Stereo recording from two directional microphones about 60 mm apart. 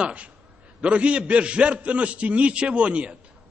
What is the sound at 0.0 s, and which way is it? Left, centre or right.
A man's voice, right.